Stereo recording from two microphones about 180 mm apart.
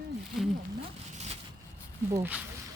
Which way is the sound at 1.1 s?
35° right (ahead or behind).